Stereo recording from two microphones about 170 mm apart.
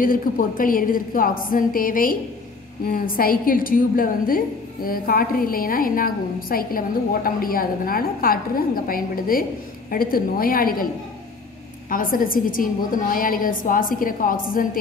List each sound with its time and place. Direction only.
0.0 s a woman's voice: 55° left (ahead or behind)
11.9 s a woman's voice: 55° left (ahead or behind)